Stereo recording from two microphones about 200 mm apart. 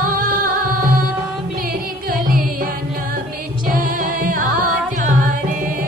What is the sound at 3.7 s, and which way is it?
Music, 45° right (ahead or behind).